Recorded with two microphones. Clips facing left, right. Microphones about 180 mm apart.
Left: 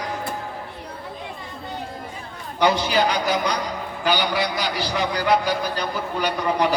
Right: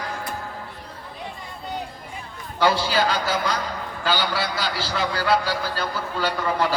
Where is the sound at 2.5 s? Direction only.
20° left (ahead or behind).